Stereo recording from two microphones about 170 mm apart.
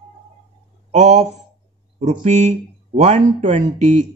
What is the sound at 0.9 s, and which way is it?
Speech, 45° right (ahead or behind).